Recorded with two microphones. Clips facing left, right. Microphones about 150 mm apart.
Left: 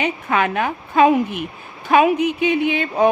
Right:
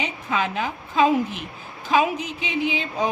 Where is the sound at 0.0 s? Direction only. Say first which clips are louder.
Left 6 dB; 65° left (ahead or behind).